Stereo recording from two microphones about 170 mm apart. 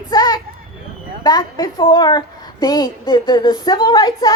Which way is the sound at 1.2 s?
25° left (ahead or behind).